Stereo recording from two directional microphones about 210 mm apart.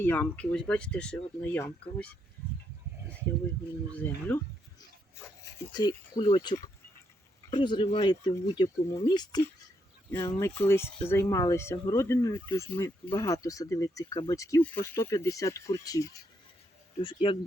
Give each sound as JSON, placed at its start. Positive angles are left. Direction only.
{"t": 0.0, "sound": "speech", "side_deg": 10}
{"t": 3.9, "sound": "speech", "side_deg": 10}
{"t": 5.5, "sound": "speech", "side_deg": 20}
{"t": 10.3, "sound": "speech", "side_deg": 5}